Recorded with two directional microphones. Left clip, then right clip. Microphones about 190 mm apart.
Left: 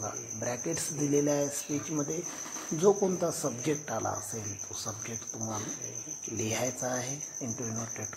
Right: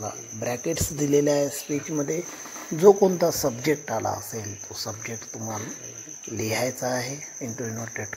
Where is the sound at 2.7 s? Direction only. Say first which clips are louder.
Right 9 dB; 20° right (ahead or behind).